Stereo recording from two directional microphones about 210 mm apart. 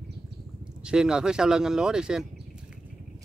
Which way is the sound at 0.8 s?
5° right (ahead or behind).